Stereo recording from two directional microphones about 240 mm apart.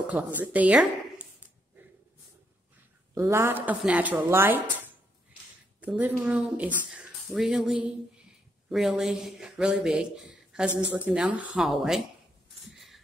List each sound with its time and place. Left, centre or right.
0.0 s speech: centre
3.2 s a woman's voice: centre
5.8 s speech: centre